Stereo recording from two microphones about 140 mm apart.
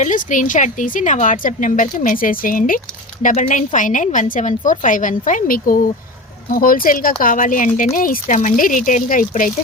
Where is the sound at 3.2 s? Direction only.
70° left (ahead or behind); by 7.1 s 90° left.